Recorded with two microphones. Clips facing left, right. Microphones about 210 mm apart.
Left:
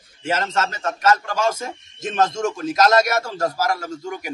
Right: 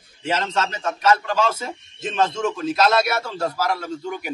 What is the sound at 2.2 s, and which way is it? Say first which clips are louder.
Speech: left 1 dB; 45° left (ahead or behind).